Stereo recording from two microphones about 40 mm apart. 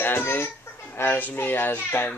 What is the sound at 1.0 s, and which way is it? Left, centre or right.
A child's voice, left.